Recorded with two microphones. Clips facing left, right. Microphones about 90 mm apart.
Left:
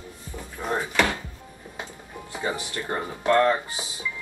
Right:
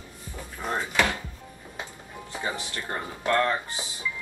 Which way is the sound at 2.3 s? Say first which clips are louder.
Left 3 dB; 20° left (ahead or behind).